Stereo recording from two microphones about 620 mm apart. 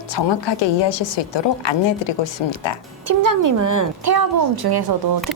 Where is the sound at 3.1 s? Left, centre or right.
Right.